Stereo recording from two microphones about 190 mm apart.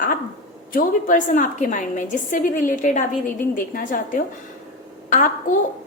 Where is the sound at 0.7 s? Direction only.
45° left (ahead or behind).